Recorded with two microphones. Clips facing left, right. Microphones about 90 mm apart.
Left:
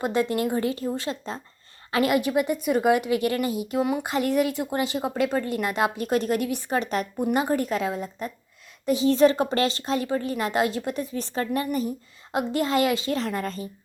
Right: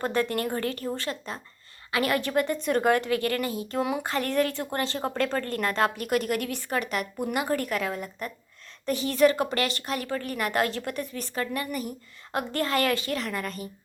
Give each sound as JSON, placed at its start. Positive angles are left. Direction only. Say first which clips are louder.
{"t": 0.0, "sound": "speech", "louder": "left 3 dB", "side_deg": 20}
{"t": 1.3, "sound": "a woman's voice", "louder": "left 3 dB", "side_deg": 30}
{"t": 3.8, "sound": "a sound", "louder": "left 3 dB", "side_deg": 0}
{"t": 4.0, "sound": "speech", "louder": "left 3 dB", "side_deg": 15}
{"t": 6.1, "sound": "a woman's voice", "louder": "left 3 dB", "side_deg": 25}